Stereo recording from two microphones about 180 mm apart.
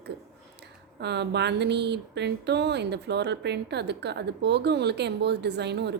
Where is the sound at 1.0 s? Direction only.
70° right (ahead or behind).